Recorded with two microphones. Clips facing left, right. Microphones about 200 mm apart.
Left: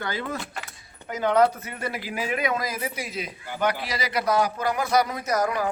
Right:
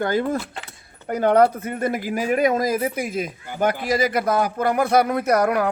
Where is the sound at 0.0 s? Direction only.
50° right (ahead or behind).